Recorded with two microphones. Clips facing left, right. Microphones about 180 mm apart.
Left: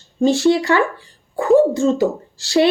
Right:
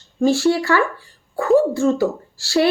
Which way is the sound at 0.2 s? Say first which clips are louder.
Left 2 dB; 20° left (ahead or behind).